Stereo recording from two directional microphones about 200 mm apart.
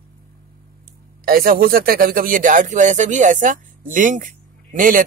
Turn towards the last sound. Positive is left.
turn(degrees=-40)  # may be behind; listen again after turning